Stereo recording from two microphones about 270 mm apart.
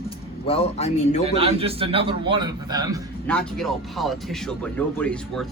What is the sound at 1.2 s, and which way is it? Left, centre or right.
A man's voice, right.